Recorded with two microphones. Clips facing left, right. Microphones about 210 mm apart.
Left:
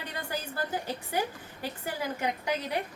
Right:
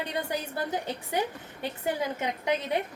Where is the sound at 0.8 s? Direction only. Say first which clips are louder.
Right 2 dB; 20° right (ahead or behind).